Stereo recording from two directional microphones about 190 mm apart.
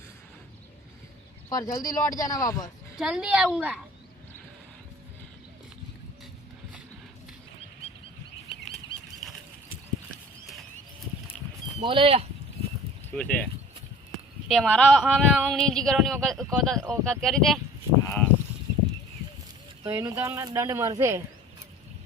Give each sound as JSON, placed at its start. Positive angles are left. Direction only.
{"t": 1.5, "sound": "speech", "side_deg": 20}
{"t": 3.0, "sound": "speech", "side_deg": -5}
{"t": 11.8, "sound": "speech", "side_deg": -25}
{"t": 13.1, "sound": "speech", "side_deg": 5}
{"t": 18.0, "sound": "a sound", "side_deg": 15}
{"t": 19.8, "sound": "speech", "side_deg": -15}